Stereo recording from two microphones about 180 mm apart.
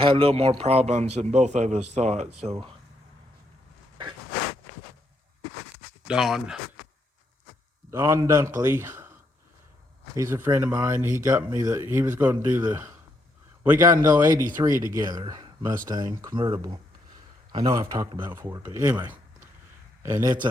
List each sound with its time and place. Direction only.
0.0 s speech: 30° right (ahead or behind)
6.1 s speech: centre (ahead or behind)
7.9 s speech: 15° right (ahead or behind)
10.2 s speech: 15° right (ahead or behind)
20.2 s speech: 25° right (ahead or behind)